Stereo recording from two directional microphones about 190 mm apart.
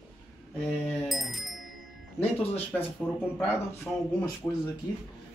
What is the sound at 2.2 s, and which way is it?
Speech, 10° left (ahead or behind).